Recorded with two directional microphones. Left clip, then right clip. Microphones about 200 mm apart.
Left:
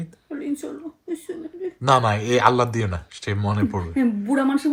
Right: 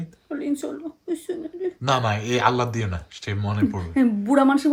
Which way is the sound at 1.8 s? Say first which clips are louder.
Left 5 dB; 5° right (ahead or behind).